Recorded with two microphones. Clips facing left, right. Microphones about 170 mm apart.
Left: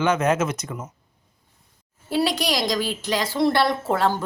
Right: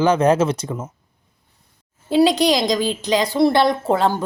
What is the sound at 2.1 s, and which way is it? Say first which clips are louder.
A woman's voice: right 8 dB; 20° right (ahead or behind).